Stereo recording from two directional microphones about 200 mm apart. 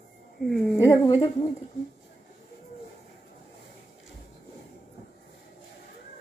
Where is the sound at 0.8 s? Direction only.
15° left (ahead or behind).